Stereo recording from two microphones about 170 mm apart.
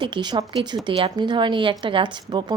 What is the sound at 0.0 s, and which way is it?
A woman's voice, 25° right (ahead or behind).